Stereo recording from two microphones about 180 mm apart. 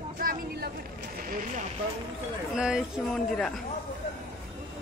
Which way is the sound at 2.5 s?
5° right (ahead or behind).